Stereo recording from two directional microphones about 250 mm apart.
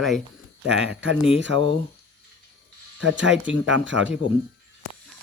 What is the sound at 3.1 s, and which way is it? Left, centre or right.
Speech, right.